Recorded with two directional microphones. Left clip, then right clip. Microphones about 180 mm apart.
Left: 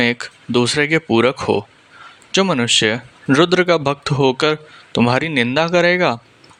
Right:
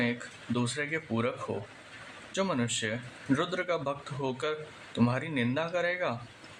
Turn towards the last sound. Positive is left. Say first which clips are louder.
# left 16 dB
turn(degrees=55)  # may be behind; listen again after turning